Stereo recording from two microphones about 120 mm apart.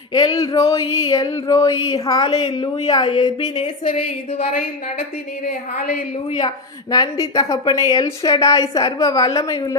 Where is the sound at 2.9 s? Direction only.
45° left (ahead or behind).